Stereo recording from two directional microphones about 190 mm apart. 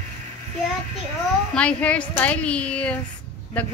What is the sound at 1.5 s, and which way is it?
Speech, 5° left (ahead or behind).